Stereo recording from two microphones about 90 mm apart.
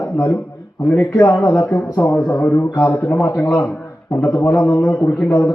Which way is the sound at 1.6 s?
15° left (ahead or behind).